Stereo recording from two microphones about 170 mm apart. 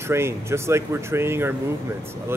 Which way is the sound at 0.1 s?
15° right (ahead or behind).